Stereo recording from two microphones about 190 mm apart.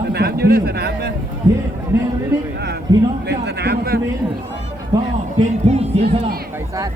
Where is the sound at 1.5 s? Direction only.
20° right (ahead or behind).